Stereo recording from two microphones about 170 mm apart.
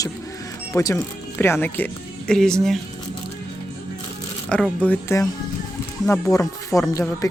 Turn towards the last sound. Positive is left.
turn(degrees=20)  # may be behind; listen again after turning